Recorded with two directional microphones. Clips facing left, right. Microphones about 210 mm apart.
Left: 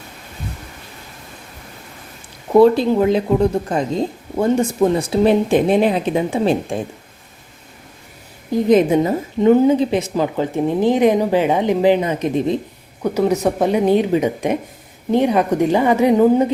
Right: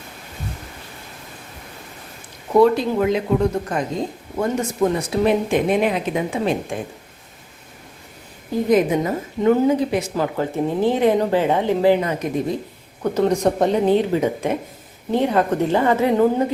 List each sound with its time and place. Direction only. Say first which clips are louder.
2.6 s speech: left 4 dB; 30° left (ahead or behind)
8.7 s a woman's voice: left 4 dB; 25° left (ahead or behind)
13.0 s speech: left 1 dB; 5° left (ahead or behind)